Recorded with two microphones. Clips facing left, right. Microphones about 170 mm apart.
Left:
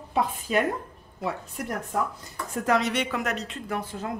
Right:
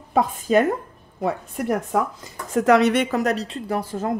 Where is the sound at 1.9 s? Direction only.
90° right; by 3.0 s 65° right (ahead or behind).